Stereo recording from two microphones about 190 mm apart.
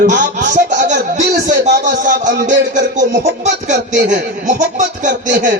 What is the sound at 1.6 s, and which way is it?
Speech, 40° right (ahead or behind).